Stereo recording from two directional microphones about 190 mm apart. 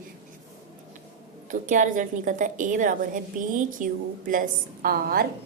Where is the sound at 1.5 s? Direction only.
40° right (ahead or behind).